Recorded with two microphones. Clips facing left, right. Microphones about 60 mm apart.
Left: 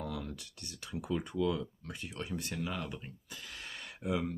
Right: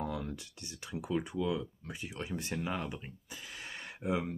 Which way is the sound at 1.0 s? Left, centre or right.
Centre.